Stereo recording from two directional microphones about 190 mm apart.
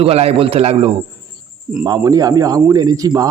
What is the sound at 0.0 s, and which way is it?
Speech, 35° right (ahead or behind).